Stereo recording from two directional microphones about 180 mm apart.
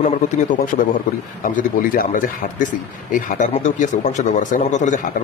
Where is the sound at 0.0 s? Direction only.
45° left (ahead or behind).